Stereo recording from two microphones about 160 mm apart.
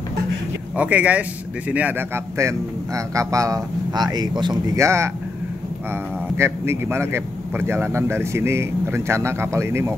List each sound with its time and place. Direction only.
0.7 s a man's voice: 10° right (ahead or behind)
6.3 s a man's voice: 15° right (ahead or behind)